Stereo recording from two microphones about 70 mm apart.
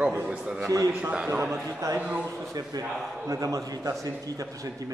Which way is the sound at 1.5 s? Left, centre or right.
Right.